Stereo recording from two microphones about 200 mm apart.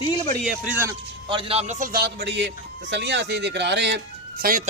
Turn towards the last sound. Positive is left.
turn(degrees=-45)  # may be behind; listen again after turning